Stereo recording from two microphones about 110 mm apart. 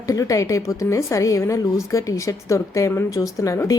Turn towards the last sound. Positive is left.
turn(degrees=30)  # may be behind; listen again after turning